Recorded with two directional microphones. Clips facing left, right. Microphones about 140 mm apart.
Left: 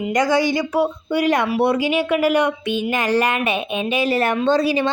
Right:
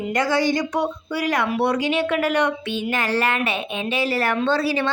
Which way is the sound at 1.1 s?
20° left (ahead or behind).